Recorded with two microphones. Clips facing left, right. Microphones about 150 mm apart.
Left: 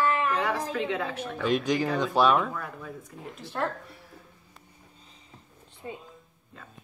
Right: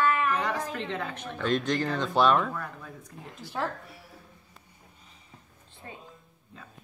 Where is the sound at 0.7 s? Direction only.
5° left (ahead or behind).